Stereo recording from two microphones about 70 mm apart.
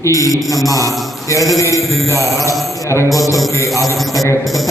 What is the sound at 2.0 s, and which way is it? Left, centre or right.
A man's voice, left.